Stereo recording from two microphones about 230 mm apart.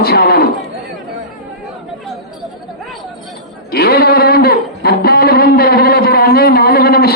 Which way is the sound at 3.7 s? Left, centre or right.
Left.